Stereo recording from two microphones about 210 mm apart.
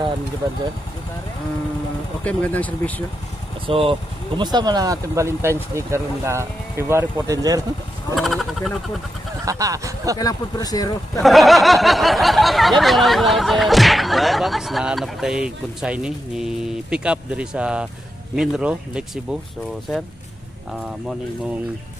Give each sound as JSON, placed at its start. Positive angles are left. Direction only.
{"t": 2.2, "sound": "speech", "side_deg": 5}
{"t": 3.6, "sound": "speech", "side_deg": -25}
{"t": 8.1, "sound": "speech", "side_deg": 0}
{"t": 9.4, "sound": "speech", "side_deg": -15}
{"t": 10.1, "sound": "speech", "side_deg": 20}
{"t": 11.1, "sound": "a sound", "side_deg": 0}
{"t": 20.7, "sound": "a sound", "side_deg": -5}